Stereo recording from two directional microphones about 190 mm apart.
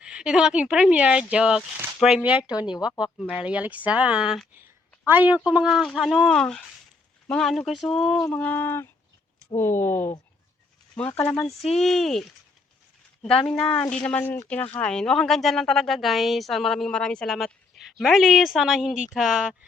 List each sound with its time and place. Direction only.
0.0 s speech: 5° right (ahead or behind)
2.6 s speech: 20° left (ahead or behind)
3.0 s speech: 5° right (ahead or behind)
13.6 s speech: 5° left (ahead or behind)